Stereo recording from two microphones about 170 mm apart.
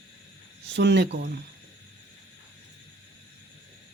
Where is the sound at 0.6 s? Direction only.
90° right; by 1.3 s 75° right (ahead or behind).